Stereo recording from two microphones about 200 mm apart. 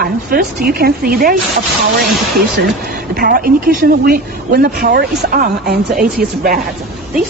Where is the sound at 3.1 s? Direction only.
45° right (ahead or behind).